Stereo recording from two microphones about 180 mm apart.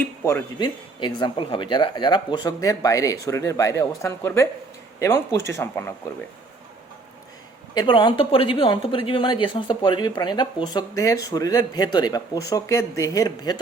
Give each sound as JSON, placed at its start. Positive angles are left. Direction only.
{"t": 0.0, "sound": "speech", "side_deg": 15}
{"t": 0.6, "sound": "speech", "side_deg": 25}
{"t": 7.7, "sound": "speech", "side_deg": 25}